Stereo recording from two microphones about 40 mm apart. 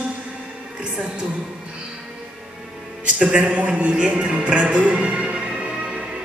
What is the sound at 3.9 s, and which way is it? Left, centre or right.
Music, right.